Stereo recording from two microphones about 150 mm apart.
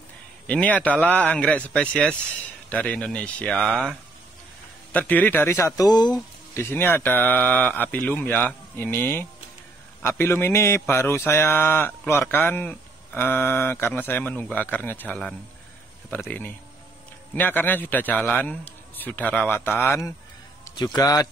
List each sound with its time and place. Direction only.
0.5 s speech: 10° left (ahead or behind)
4.9 s speech: 10° left (ahead or behind); by 6.2 s 30° left (ahead or behind)
6.5 s a man's voice: 15° left (ahead or behind)